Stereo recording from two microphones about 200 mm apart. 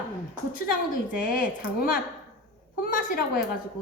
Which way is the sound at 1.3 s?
45° left (ahead or behind).